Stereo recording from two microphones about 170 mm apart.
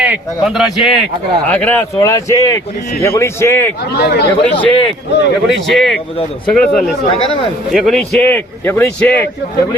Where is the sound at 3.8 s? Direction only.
70° left (ahead or behind).